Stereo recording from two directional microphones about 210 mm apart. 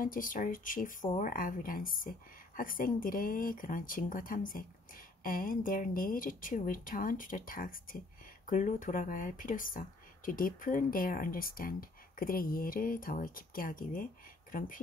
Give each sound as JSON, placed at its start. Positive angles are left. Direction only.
{"t": 0.0, "sound": "a woman's voice", "side_deg": 40}